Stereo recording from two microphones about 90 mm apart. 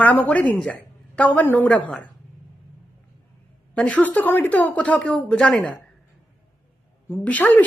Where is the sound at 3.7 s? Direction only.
15° left (ahead or behind).